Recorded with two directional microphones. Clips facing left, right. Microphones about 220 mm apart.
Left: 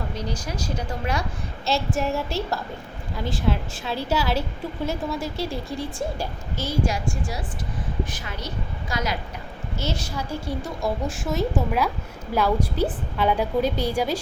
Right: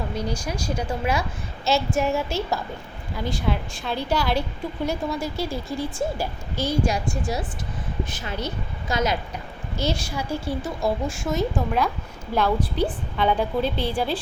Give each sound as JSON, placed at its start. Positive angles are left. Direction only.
{"t": 0.2, "sound": "a woman's voice", "side_deg": -10}
{"t": 6.6, "sound": "a woman's voice", "side_deg": -15}
{"t": 8.9, "sound": "a woman's voice", "side_deg": -25}